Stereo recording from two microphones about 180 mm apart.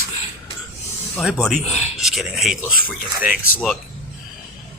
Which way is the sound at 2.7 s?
50° left (ahead or behind).